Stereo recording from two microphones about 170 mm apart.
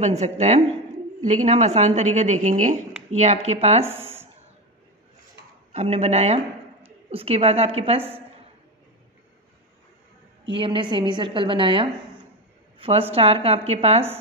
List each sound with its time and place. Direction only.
0.0 s a woman's voice: 40° right (ahead or behind)
3.8 s speech: 15° right (ahead or behind)
5.7 s speech: 40° right (ahead or behind)
10.5 s a woman's voice: 30° right (ahead or behind)